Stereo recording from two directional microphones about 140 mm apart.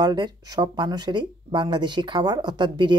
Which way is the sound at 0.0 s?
30° right (ahead or behind).